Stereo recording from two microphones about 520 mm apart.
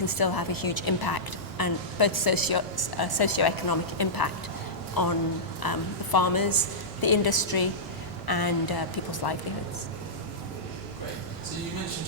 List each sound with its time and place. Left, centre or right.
0.0 s a woman's voice: left
5.6 s a woman's voice: left